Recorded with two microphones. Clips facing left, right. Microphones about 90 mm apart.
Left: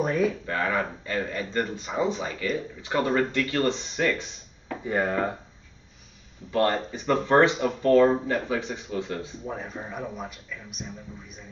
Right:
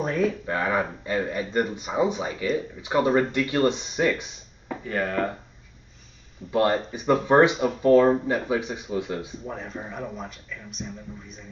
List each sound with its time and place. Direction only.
0.0 s speech: centre (ahead or behind)
0.5 s speech: 15° right (ahead or behind)
4.8 s speech: 15° left (ahead or behind)
6.5 s speech: 15° right (ahead or behind)
9.4 s speech: 5° left (ahead or behind)